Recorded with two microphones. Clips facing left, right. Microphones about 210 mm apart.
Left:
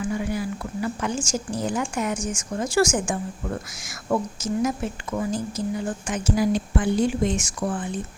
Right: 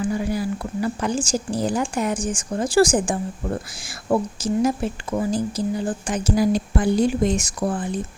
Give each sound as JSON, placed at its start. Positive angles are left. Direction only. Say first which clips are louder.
{"t": 0.0, "sound": "a woman's voice", "louder": "right 3 dB", "side_deg": -35}